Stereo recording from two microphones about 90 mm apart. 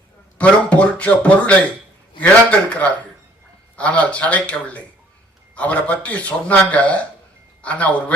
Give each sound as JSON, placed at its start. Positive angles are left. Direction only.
{"t": 0.3, "sound": "speech", "side_deg": 15}